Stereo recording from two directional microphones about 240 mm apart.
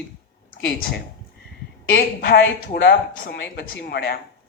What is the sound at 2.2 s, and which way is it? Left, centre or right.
Speech, left.